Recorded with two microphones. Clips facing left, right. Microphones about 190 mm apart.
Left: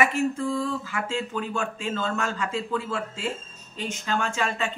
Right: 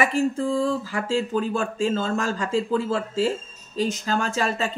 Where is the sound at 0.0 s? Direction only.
35° right (ahead or behind).